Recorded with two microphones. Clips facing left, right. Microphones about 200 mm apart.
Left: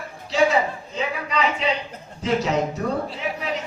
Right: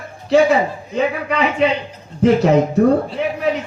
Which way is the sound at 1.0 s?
60° right (ahead or behind).